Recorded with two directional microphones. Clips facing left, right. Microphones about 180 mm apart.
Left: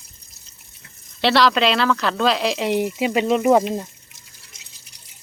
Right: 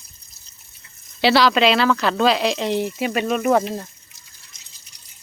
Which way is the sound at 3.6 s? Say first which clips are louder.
Left 3 dB; 10° left (ahead or behind).